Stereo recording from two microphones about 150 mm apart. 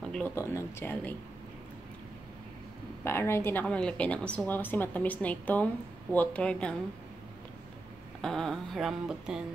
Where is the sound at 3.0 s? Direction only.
15° left (ahead or behind).